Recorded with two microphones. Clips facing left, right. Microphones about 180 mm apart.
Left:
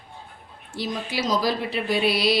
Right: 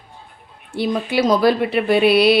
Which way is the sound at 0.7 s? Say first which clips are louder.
Right 8 dB; 60° right (ahead or behind).